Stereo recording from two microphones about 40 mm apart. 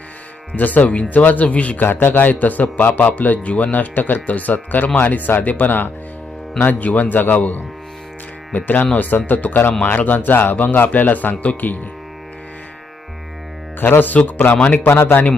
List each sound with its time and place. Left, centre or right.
0.5 s speech: left
1.8 s a man's voice: left
2.3 s speech: left
10.2 s speech: left
13.7 s speech: left
14.5 s a man's voice: left
15.0 s speech: left